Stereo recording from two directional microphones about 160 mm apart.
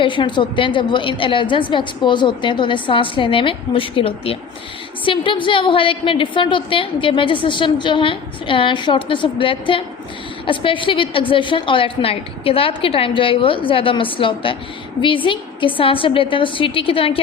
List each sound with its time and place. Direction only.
0.0 s a woman's voice: 30° left (ahead or behind)